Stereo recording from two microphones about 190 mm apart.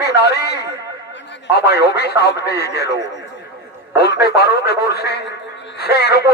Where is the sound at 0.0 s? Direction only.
60° left (ahead or behind).